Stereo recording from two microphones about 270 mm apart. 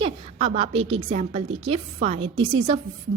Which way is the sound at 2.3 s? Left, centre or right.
Right.